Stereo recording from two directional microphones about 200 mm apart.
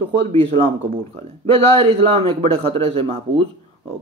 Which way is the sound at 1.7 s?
30° right (ahead or behind).